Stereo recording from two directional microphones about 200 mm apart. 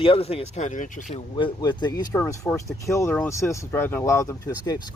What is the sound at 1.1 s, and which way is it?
Speech, 25° left (ahead or behind).